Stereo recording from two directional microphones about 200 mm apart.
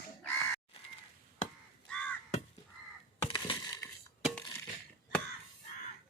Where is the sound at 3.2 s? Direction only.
25° left (ahead or behind).